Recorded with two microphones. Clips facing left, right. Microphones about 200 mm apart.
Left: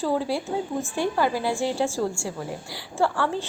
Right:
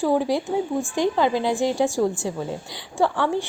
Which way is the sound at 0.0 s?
15° right (ahead or behind).